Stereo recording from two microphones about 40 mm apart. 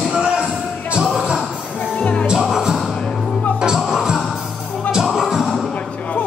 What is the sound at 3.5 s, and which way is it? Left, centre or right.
Music, centre.